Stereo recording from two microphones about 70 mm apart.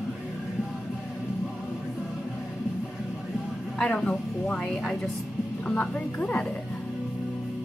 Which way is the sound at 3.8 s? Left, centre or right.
Centre.